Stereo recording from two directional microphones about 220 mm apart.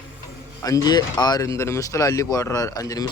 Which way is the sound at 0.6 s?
15° left (ahead or behind).